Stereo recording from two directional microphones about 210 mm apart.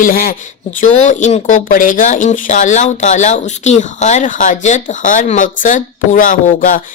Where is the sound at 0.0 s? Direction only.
45° left (ahead or behind).